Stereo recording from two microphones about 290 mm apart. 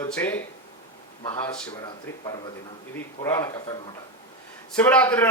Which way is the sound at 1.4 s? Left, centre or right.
Centre.